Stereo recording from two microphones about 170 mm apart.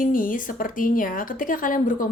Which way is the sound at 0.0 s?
50° left (ahead or behind).